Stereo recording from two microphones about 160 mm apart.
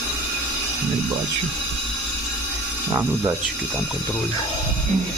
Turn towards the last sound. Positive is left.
turn(degrees=-20)  # may be behind; listen again after turning